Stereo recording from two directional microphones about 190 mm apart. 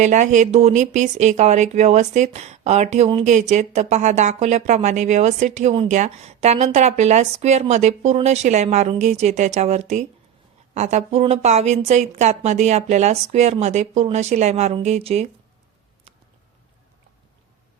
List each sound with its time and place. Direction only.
0.0 s speech: 40° right (ahead or behind)